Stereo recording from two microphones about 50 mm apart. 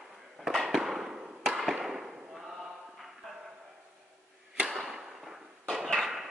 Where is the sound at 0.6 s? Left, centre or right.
Centre.